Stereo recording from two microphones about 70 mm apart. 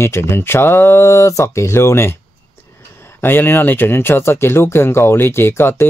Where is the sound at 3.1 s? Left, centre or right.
Left.